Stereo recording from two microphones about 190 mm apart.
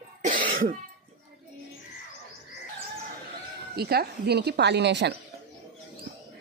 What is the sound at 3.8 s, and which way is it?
Speech, 55° right (ahead or behind).